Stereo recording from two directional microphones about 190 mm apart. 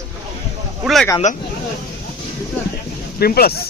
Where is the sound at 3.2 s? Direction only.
55° left (ahead or behind).